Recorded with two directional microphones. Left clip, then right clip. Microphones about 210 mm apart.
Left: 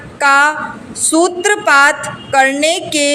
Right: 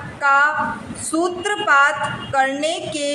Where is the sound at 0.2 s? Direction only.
35° left (ahead or behind).